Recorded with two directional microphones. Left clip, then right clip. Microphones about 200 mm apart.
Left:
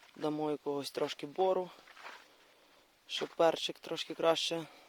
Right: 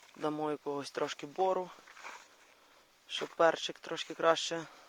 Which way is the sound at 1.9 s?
40° right (ahead or behind).